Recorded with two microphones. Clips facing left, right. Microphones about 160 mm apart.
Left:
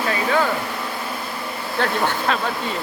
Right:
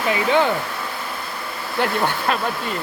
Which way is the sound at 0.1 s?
20° right (ahead or behind).